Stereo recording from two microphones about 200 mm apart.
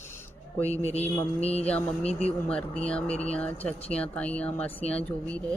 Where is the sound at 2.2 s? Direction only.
5° left (ahead or behind).